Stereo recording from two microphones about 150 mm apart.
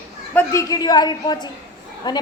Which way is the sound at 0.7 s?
25° left (ahead or behind).